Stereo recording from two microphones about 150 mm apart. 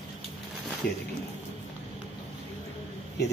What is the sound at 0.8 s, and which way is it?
Speech, 90° left.